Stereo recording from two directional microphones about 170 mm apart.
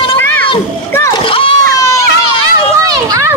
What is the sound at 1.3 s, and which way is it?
Splash, 30° left (ahead or behind).